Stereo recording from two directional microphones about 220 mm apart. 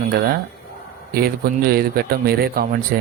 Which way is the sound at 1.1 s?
45° right (ahead or behind).